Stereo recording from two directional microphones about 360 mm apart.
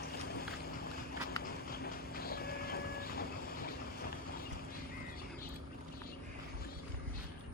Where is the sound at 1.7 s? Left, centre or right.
Left.